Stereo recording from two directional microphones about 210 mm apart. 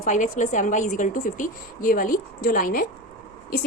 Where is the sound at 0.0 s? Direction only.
35° left (ahead or behind).